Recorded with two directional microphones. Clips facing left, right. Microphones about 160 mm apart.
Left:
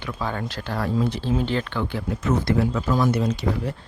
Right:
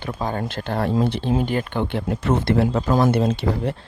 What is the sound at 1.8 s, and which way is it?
Speech, 65° right (ahead or behind).